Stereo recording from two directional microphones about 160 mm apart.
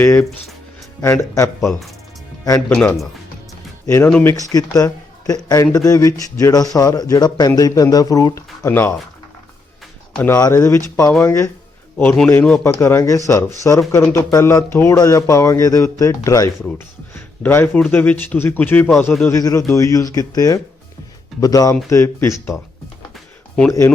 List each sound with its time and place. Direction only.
0.0 s speech: 15° left (ahead or behind)
2.6 s speech: 5° left (ahead or behind)
10.2 s speech: 20° left (ahead or behind)
23.1 s music: centre (ahead or behind)